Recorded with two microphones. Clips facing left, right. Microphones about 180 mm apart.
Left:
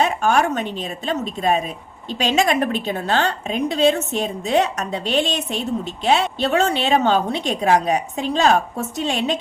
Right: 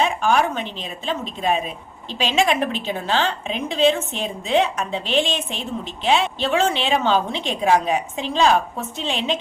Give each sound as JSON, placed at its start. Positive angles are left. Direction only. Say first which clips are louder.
{"t": 0.0, "sound": "a woman's voice", "louder": "left 1 dB", "side_deg": 45}